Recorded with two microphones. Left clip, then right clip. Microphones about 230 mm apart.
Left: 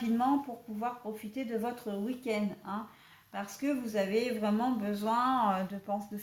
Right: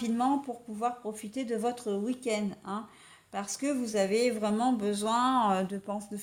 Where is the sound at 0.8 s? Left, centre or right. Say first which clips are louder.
Right 4 dB; right.